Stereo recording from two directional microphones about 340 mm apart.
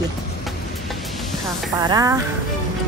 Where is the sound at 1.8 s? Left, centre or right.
Centre.